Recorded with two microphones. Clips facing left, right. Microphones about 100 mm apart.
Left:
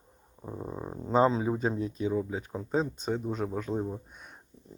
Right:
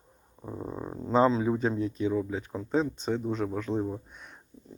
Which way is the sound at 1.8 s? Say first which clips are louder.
Right 2 dB; 20° left (ahead or behind).